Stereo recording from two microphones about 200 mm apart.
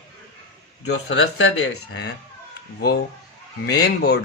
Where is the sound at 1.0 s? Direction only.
70° left (ahead or behind).